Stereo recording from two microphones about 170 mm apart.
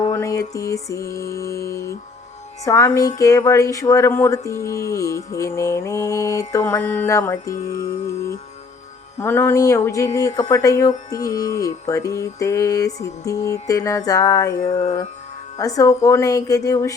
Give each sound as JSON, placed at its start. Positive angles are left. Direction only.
{"t": 0.0, "sound": "speech", "side_deg": 20}